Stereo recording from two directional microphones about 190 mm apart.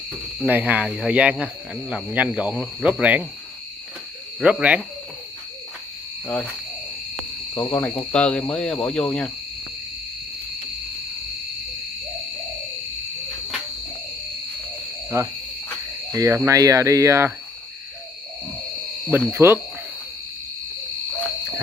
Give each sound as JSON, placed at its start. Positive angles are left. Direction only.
{"t": 0.4, "sound": "speech", "side_deg": -10}
{"t": 4.4, "sound": "speech", "side_deg": -5}
{"t": 6.2, "sound": "speech", "side_deg": 10}
{"t": 7.5, "sound": "speech", "side_deg": 10}
{"t": 15.1, "sound": "speech", "side_deg": -15}
{"t": 19.0, "sound": "speech", "side_deg": -10}